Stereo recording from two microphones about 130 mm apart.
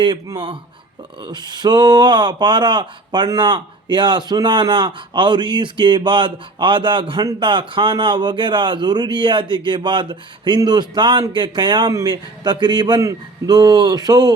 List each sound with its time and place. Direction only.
0.0 s speech: 35° right (ahead or behind)